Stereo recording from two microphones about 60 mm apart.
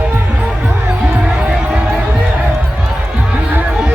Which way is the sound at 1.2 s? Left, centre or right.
Centre.